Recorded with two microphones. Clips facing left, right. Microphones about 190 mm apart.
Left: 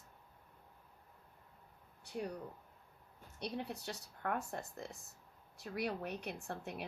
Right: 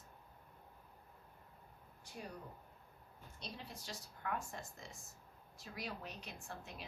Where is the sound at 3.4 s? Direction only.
65° left (ahead or behind).